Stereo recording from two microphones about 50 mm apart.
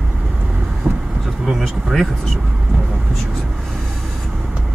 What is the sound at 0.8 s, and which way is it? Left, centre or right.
Vehicle, right.